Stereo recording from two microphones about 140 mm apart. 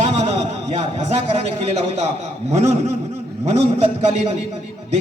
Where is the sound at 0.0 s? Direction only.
50° right (ahead or behind).